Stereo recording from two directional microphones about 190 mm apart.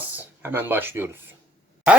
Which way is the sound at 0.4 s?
10° right (ahead or behind).